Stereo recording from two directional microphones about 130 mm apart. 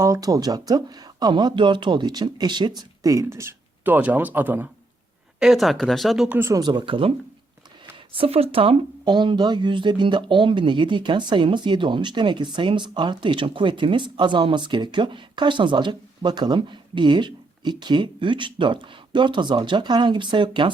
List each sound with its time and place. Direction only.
0.0 s speech: 25° right (ahead or behind)
5.4 s speech: centre (ahead or behind)
6.2 s speech: 15° right (ahead or behind)
6.6 s speech: 35° right (ahead or behind)